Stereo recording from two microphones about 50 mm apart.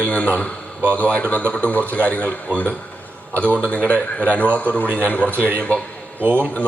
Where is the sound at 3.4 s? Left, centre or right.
Left.